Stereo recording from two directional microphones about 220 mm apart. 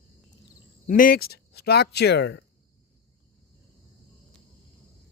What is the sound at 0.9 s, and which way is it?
Speech, 40° left (ahead or behind).